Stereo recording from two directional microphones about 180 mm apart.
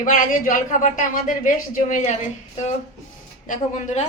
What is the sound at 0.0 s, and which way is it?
Speech, 45° left (ahead or behind).